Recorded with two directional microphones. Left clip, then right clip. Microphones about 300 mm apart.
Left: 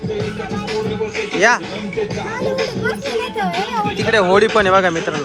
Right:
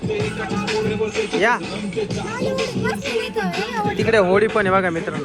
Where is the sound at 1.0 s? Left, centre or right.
Right.